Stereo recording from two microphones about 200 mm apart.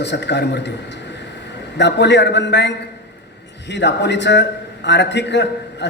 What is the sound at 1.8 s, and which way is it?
A man's voice, 60° left (ahead or behind).